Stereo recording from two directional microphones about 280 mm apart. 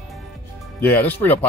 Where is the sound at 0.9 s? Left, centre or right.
Centre.